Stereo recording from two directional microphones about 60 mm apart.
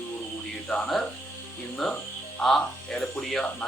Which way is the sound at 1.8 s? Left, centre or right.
Centre.